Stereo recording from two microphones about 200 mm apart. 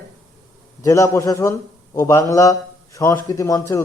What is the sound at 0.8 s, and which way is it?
A man's voice, 15° left (ahead or behind).